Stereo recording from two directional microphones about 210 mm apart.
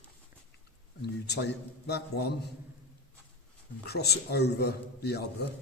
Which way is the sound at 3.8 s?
50° left (ahead or behind).